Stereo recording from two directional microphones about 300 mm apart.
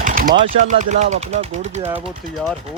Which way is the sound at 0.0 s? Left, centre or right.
Right.